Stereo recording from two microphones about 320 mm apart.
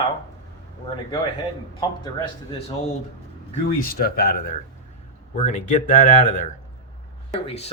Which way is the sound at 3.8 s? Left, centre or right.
Left.